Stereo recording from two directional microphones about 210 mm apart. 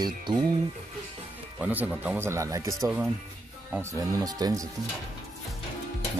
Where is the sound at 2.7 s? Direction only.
5° right (ahead or behind).